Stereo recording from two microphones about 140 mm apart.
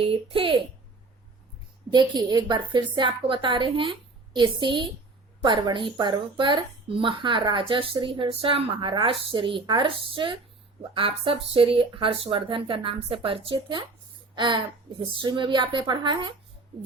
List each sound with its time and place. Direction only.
0.0 s speech: 40° right (ahead or behind)
1.9 s speech: 30° right (ahead or behind)